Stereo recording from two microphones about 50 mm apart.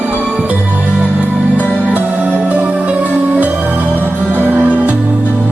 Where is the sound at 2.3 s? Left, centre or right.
Right.